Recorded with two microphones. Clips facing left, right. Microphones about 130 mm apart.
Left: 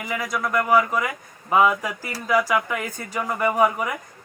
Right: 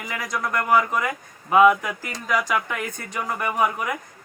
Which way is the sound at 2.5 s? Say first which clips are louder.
Left 2 dB; 15° left (ahead or behind).